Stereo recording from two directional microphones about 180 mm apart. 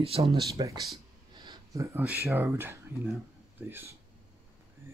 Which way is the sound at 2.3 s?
15° right (ahead or behind).